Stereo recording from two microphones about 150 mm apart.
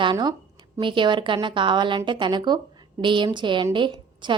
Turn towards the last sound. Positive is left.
turn(degrees=-30)  # may be behind; listen again after turning